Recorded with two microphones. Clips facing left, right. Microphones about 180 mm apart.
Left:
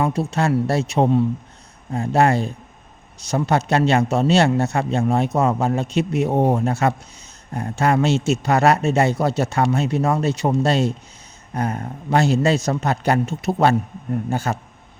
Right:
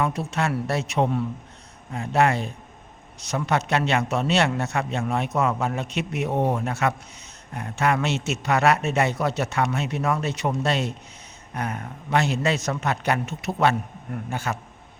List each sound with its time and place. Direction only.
0.0 s a man's voice: 30° left (ahead or behind)